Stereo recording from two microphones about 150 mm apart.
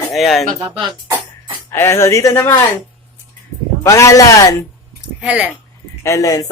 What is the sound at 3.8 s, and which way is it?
Speech, 20° left (ahead or behind).